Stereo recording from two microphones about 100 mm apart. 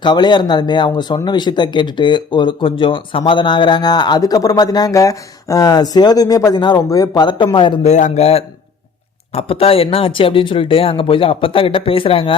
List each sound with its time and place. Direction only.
0.0 s speech: 50° left (ahead or behind)
8.2 s speech: 85° left
9.3 s speech: 75° left (ahead or behind)